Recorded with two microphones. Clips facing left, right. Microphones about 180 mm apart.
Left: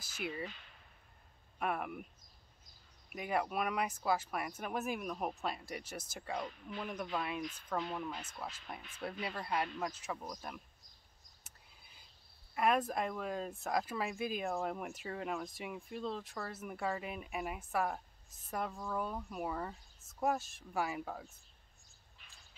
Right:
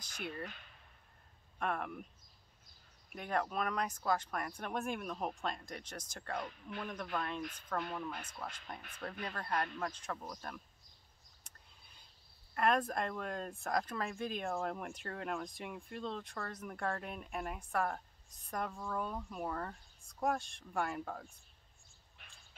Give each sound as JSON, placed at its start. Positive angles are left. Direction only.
{"t": 0.0, "sound": "speech", "side_deg": 5}
{"t": 1.6, "sound": "speech", "side_deg": 5}
{"t": 3.1, "sound": "speech", "side_deg": 10}
{"t": 11.4, "sound": "a sound", "side_deg": 5}
{"t": 12.5, "sound": "speech", "side_deg": 5}